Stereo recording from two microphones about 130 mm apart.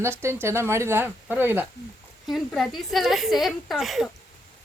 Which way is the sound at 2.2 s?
Centre (ahead or behind).